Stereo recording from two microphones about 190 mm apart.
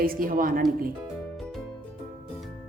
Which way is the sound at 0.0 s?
50° right (ahead or behind).